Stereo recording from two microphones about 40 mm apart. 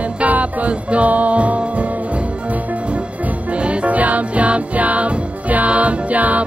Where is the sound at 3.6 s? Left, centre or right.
Right.